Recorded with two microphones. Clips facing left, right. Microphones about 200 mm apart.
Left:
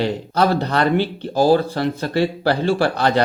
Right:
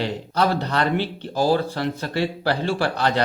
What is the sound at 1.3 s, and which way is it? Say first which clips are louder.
Speech: left 5 dB; 40° left (ahead or behind).